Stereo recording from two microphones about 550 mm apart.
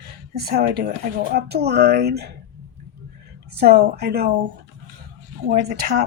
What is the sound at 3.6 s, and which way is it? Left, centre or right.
Speech, centre.